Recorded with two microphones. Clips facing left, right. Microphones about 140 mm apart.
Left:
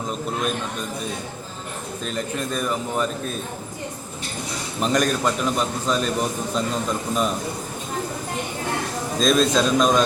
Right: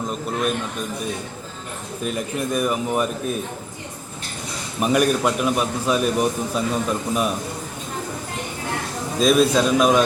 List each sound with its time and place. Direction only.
2.0 s a man's voice: 10° right (ahead or behind)
4.8 s a man's voice: 10° right (ahead or behind)
9.1 s a man's voice: 10° right (ahead or behind)